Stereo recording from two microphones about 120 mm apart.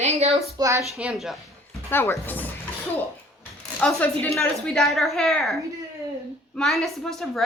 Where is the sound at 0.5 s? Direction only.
25° right (ahead or behind).